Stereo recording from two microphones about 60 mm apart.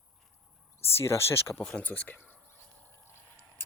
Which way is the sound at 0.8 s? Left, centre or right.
Left.